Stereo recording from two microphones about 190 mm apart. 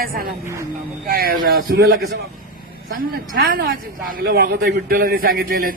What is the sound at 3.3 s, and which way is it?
Speech, 55° right (ahead or behind).